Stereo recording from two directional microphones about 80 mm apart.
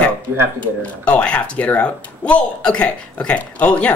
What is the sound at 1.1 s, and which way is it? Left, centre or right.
Speech, centre.